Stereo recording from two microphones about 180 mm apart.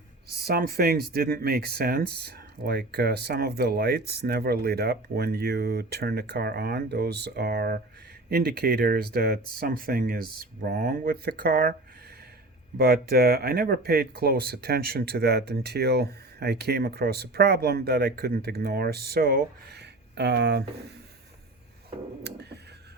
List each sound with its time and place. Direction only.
0.4 s speech: 55° right (ahead or behind)
12.7 s speech: 60° right (ahead or behind)
22.2 s a sound: 65° right (ahead or behind)